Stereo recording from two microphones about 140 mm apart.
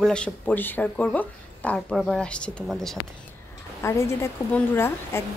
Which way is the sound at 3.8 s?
20° left (ahead or behind).